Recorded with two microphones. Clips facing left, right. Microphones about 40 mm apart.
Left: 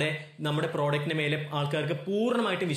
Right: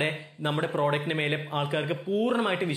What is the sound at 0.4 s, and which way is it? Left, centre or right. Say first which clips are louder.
Speech: right 2 dB; centre.